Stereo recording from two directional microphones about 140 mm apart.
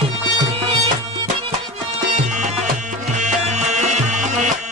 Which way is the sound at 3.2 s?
60° right (ahead or behind).